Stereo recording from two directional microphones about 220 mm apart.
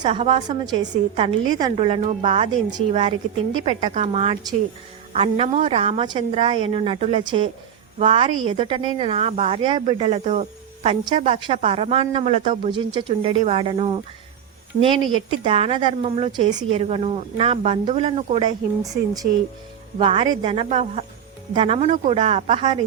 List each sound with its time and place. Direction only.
0.0 s a woman's voice: 30° right (ahead or behind)
0.4 s a woman's voice: 20° right (ahead or behind)
1.8 s a woman's voice: 30° right (ahead or behind)